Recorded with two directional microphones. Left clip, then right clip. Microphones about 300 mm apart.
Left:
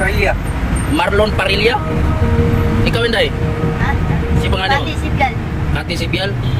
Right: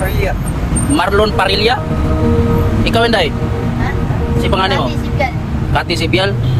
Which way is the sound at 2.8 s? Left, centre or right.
Centre.